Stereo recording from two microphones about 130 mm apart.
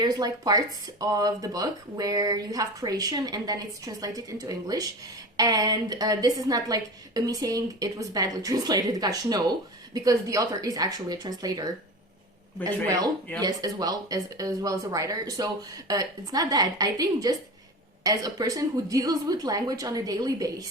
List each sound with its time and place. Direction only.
0.0 s speech: 30° right (ahead or behind)
13.4 s speech: 30° right (ahead or behind)